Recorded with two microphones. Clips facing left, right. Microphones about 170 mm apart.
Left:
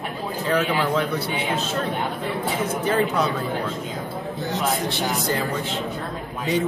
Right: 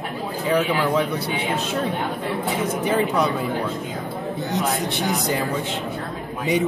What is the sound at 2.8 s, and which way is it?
Speech, 15° right (ahead or behind).